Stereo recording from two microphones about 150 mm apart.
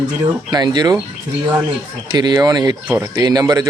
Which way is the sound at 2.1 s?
30° right (ahead or behind).